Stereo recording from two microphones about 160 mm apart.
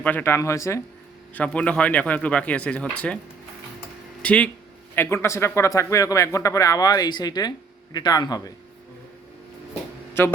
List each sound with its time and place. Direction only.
0.0 s speech: 10° left (ahead or behind)
4.2 s speech: 10° left (ahead or behind); by 8.5 s 25° left (ahead or behind)
10.2 s speech: 15° left (ahead or behind)